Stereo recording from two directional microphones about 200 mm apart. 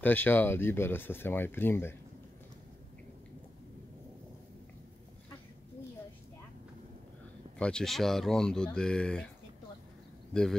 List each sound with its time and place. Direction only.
0.0 s speech: 10° left (ahead or behind)
7.5 s speech: 5° left (ahead or behind)